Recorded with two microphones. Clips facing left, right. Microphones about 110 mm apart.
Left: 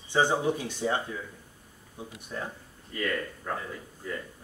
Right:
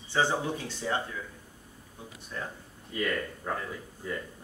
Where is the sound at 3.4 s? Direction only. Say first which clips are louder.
Right 1 dB; 10° right (ahead or behind).